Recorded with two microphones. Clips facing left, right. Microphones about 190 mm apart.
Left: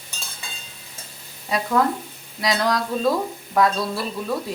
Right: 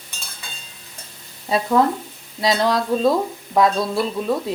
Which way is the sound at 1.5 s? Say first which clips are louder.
Right 3 dB; 25° right (ahead or behind).